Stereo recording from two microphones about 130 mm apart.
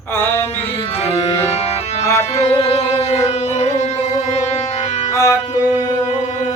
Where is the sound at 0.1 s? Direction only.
15° left (ahead or behind).